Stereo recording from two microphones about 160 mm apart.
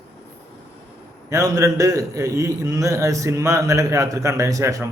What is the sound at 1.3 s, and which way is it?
A man's voice, 20° right (ahead or behind).